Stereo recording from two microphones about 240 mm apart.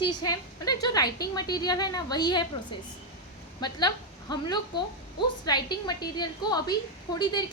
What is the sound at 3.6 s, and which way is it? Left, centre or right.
A woman's voice, centre.